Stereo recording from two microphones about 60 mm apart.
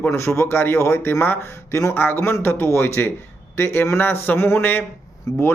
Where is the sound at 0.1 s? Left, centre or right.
Left.